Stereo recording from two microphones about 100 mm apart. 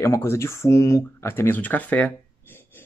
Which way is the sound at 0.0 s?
30° left (ahead or behind).